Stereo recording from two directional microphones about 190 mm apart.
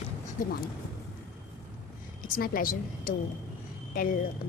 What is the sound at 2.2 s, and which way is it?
A woman's voice, 50° left (ahead or behind).